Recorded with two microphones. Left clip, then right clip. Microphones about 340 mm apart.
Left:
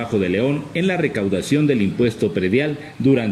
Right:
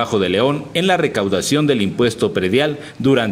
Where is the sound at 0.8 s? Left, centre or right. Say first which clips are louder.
Right 5 dB; right.